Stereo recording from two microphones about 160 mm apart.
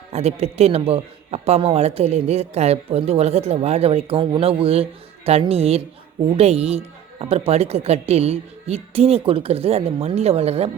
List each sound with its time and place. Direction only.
0.1 s a man's voice: 40° right (ahead or behind)